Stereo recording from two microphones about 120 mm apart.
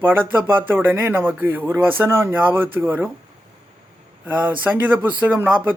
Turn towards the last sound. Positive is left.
turn(degrees=-15)  # may be behind; listen again after turning